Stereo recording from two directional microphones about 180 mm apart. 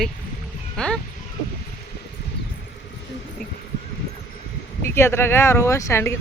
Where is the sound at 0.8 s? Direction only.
5° left (ahead or behind).